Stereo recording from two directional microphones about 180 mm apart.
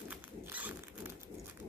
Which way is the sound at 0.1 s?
10° right (ahead or behind).